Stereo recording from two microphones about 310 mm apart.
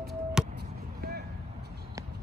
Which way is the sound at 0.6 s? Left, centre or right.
Right.